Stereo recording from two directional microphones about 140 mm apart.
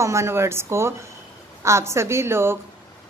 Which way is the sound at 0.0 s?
20° right (ahead or behind).